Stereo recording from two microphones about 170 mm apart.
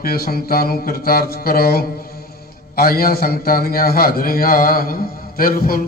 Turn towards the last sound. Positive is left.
turn(degrees=60)  # may be behind; listen again after turning